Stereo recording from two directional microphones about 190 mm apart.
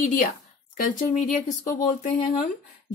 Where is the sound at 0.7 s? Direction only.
45° left (ahead or behind).